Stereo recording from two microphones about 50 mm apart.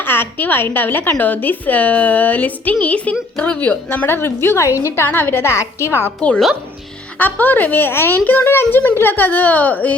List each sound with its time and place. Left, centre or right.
0.0 s a woman's voice: left
3.6 s a woman's voice: left
4.0 s a woman's voice: left
5.5 s a woman's voice: left
6.1 s a woman's voice: centre
7.2 s a woman's voice: left
8.2 s a woman's voice: left
8.4 s a woman's voice: left